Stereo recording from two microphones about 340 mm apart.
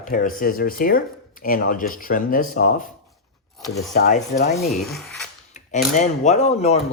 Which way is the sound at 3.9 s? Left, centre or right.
Left.